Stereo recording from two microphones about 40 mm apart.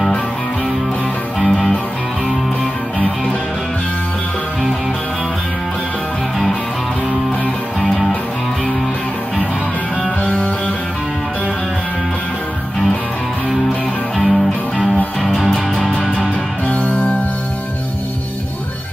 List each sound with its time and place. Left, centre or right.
1.4 s music: centre
14.1 s music: centre
16.6 s music: left